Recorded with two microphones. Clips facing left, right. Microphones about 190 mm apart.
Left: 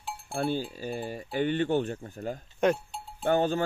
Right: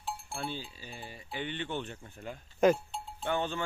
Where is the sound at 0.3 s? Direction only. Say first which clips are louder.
Left 14 dB; 45° left (ahead or behind).